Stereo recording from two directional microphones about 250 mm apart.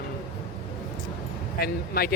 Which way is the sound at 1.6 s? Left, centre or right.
Left.